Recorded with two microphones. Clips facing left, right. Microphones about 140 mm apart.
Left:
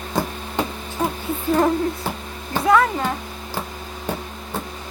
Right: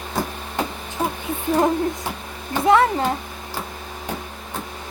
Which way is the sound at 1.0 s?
5° right (ahead or behind).